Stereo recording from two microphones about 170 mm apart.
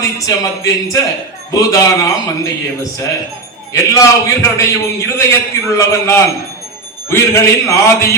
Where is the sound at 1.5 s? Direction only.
20° left (ahead or behind).